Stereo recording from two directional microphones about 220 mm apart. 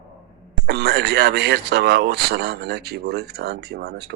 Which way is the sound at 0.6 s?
50° right (ahead or behind).